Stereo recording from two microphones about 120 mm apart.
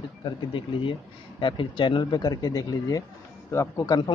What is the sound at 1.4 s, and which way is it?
Speech, 40° left (ahead or behind).